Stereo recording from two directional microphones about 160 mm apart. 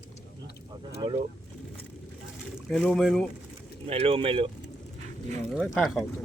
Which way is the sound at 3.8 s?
35° right (ahead or behind).